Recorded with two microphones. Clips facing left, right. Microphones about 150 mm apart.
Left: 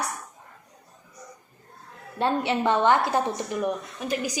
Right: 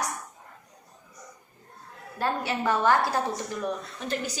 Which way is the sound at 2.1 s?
25° left (ahead or behind).